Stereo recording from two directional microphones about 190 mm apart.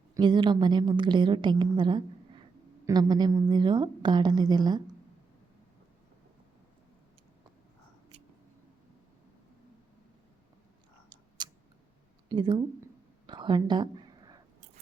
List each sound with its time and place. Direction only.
0.1 s a woman's voice: 25° right (ahead or behind)
11.4 s a sound: 20° right (ahead or behind)
12.3 s a woman's voice: 25° right (ahead or behind)
13.2 s whispering: 25° right (ahead or behind)